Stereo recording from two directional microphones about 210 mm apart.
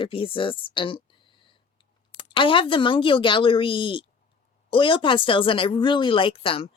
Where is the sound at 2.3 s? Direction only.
25° left (ahead or behind).